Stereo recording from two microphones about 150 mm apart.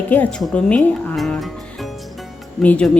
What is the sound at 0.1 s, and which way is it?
Speech, 10° left (ahead or behind).